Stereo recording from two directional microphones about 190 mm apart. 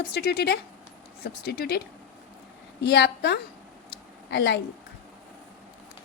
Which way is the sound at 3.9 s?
60° left (ahead or behind).